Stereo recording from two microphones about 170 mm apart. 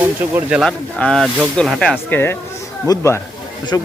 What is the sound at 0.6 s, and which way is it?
Speech, 5° left (ahead or behind).